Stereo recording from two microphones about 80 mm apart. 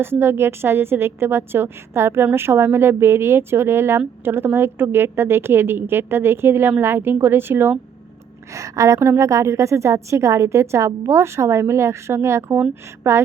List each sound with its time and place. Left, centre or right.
0.0 s a woman's voice: right
8.5 s a woman's voice: right